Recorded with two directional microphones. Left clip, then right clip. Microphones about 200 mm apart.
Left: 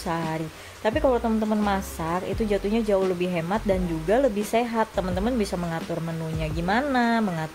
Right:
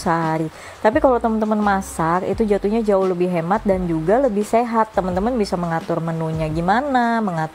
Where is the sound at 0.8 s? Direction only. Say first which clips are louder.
Right 7 dB; 25° right (ahead or behind).